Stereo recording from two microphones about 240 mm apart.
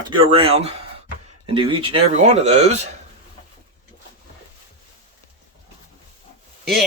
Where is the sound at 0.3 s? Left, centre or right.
Right.